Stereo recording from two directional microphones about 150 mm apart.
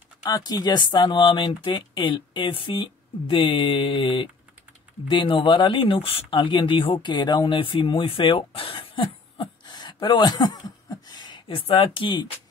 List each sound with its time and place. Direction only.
0.2 s speech: 25° left (ahead or behind)